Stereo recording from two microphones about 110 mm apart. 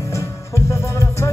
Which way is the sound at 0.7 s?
25° left (ahead or behind).